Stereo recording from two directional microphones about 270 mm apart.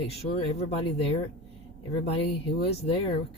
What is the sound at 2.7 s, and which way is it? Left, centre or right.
Speech, left.